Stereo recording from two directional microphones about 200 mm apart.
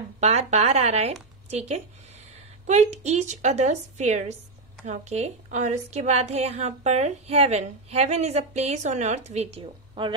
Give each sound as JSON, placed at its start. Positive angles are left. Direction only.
{"t": 0.2, "sound": "a woman's voice", "side_deg": -35}